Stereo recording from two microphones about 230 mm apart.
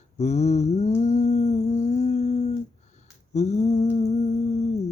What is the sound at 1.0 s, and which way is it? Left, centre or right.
Humming, left.